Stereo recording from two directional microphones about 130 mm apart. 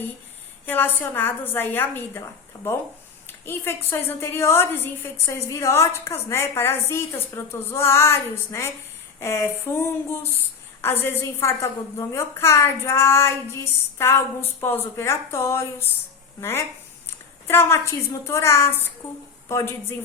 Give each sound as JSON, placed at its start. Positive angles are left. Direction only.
{"t": 0.6, "sound": "a woman's voice", "side_deg": 15}
{"t": 3.4, "sound": "a woman's voice", "side_deg": 15}
{"t": 9.2, "sound": "a woman's voice", "side_deg": 20}